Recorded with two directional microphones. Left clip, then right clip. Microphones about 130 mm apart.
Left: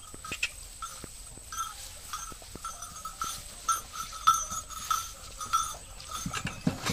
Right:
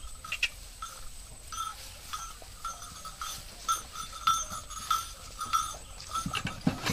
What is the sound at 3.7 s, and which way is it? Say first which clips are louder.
Livestock: left 1 dB; 5° right (ahead or behind).